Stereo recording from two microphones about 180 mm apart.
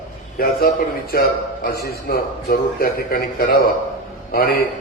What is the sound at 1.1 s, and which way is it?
A man's voice, 55° left (ahead or behind).